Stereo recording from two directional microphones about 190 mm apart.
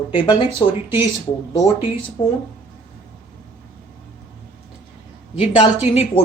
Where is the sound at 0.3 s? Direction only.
25° left (ahead or behind).